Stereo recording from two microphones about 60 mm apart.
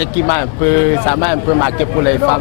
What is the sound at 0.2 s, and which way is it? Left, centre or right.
Speech, left.